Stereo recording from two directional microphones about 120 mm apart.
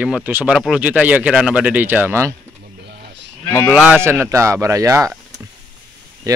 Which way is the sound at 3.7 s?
10° right (ahead or behind).